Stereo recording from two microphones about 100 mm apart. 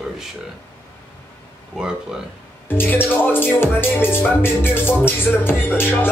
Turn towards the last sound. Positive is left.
turn(degrees=20)  # may be behind; listen again after turning